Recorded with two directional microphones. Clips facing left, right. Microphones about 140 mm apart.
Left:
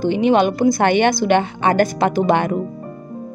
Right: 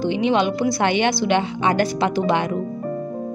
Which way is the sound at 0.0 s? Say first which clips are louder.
Left 4 dB; 50° left (ahead or behind).